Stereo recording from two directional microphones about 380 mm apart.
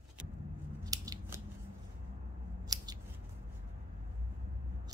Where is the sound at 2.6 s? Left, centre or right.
Centre.